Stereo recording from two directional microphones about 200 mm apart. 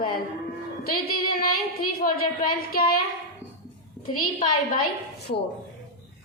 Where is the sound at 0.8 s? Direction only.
50° left (ahead or behind).